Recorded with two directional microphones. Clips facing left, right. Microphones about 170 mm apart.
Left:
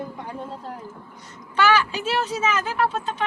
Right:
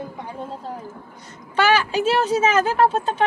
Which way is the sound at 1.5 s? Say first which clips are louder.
Right 2 dB; 40° right (ahead or behind).